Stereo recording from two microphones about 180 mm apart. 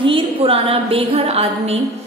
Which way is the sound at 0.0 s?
30° right (ahead or behind).